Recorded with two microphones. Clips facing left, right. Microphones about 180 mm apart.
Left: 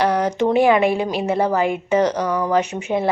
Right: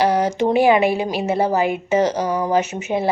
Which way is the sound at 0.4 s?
30° right (ahead or behind).